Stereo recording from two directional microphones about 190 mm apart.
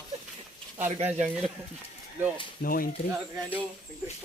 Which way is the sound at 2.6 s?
50° left (ahead or behind).